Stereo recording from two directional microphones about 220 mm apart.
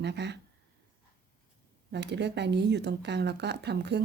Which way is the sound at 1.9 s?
50° right (ahead or behind).